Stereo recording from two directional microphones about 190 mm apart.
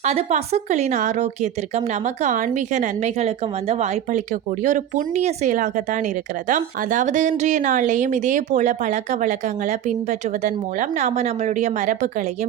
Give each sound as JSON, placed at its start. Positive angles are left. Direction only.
{"t": 0.0, "sound": "a woman's voice", "side_deg": -35}